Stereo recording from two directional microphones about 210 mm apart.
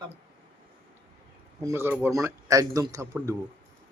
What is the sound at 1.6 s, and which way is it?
A man's voice, 10° right (ahead or behind).